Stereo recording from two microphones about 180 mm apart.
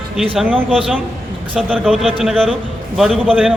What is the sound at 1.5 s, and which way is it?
A man's voice, centre (ahead or behind).